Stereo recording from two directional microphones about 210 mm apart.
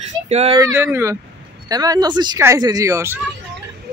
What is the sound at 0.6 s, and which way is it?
Speech, 10° right (ahead or behind).